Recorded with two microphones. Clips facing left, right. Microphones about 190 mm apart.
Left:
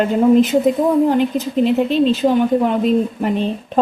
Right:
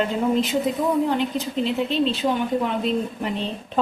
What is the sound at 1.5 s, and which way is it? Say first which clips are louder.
Dishes: left 8 dB; 50° left (ahead or behind).